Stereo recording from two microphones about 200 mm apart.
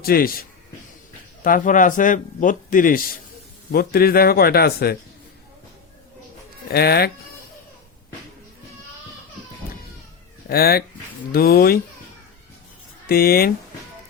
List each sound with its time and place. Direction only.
0.0 s a man's voice: 50° left (ahead or behind)
1.5 s a man's voice: 40° left (ahead or behind)
6.7 s a man's voice: 50° left (ahead or behind)
10.5 s a man's voice: 50° left (ahead or behind)
13.1 s a man's voice: 50° left (ahead or behind)